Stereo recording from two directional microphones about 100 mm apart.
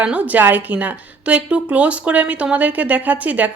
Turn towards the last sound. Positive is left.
turn(degrees=-15)  # may be behind; listen again after turning